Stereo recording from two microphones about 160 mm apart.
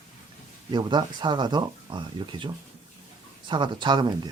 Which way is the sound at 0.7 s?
30° right (ahead or behind).